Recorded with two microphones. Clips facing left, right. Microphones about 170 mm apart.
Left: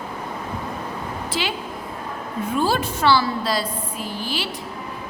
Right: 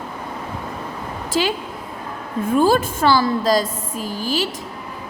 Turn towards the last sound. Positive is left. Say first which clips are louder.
# right 5 dB
turn(degrees=-40)  # may be behind; listen again after turning